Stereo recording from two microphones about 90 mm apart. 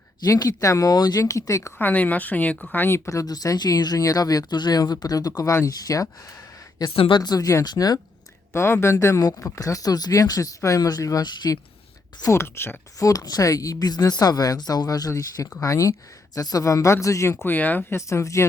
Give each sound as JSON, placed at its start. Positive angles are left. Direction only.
{"t": 0.2, "sound": "speech", "side_deg": 45}
{"t": 1.2, "sound": "speech", "side_deg": 35}
{"t": 1.8, "sound": "speech", "side_deg": 20}
{"t": 3.1, "sound": "speech", "side_deg": 40}
{"t": 6.9, "sound": "a woman's voice", "side_deg": 90}
{"t": 7.2, "sound": "speech", "side_deg": 45}
{"t": 8.5, "sound": "speech", "side_deg": 30}
{"t": 9.6, "sound": "speech", "side_deg": 40}
{"t": 12.3, "sound": "speech", "side_deg": 25}
{"t": 13.0, "sound": "speech", "side_deg": 40}
{"t": 17.9, "sound": "speech", "side_deg": 35}